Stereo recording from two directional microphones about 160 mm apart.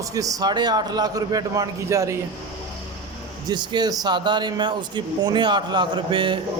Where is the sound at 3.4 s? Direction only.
25° right (ahead or behind).